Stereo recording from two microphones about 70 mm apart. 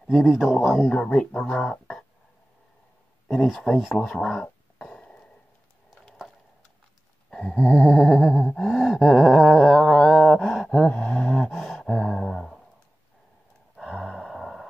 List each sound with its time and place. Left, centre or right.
0.1 s speech: centre
0.8 s speech: centre
3.3 s speech: centre
3.5 s speech: centre
4.2 s a sound: centre
7.2 s a sound: centre
7.6 s humming: centre
8.6 s a sound: centre
14.0 s gasp: centre